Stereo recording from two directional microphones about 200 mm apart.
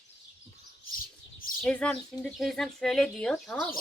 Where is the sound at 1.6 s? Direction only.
5° left (ahead or behind).